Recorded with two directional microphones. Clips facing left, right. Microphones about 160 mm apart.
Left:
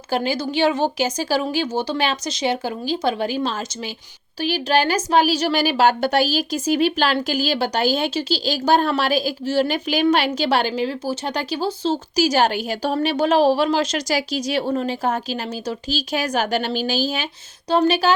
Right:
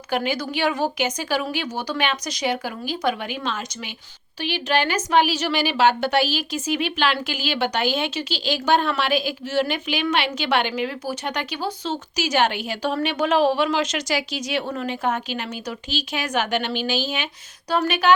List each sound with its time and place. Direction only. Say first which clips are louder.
0.1 s a woman's voice: left 2 dB; 30° left (ahead or behind)
17.7 s a woman's voice: left 4 dB; 30° left (ahead or behind)